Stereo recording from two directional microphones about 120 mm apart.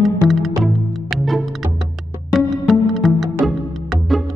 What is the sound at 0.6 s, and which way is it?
Music, centre (ahead or behind).